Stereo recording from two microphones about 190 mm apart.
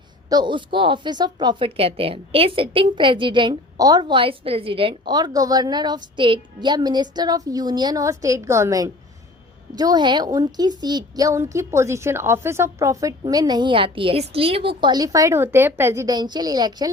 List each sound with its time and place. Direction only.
0.3 s speech: 25° right (ahead or behind)